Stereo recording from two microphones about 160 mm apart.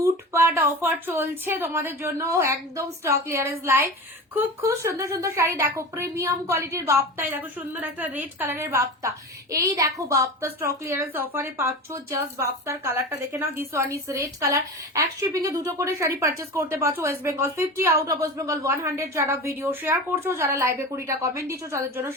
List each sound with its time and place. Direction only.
0.0 s speech: 15° right (ahead or behind)